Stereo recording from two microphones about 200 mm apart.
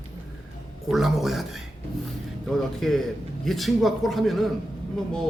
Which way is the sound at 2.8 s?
Centre (ahead or behind).